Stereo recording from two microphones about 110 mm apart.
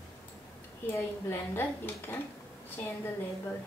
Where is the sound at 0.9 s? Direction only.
20° left (ahead or behind).